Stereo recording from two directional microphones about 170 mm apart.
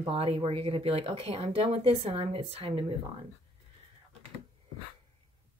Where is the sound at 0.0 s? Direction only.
35° right (ahead or behind).